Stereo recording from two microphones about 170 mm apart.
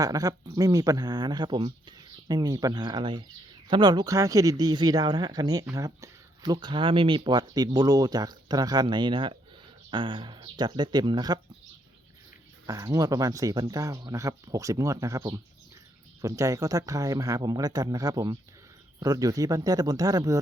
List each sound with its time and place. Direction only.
0.0 s speech: 20° right (ahead or behind)
12.6 s speech: 20° right (ahead or behind)
16.2 s speech: 20° right (ahead or behind)